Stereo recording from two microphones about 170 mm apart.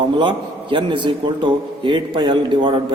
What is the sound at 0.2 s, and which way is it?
A man's voice, 30° right (ahead or behind).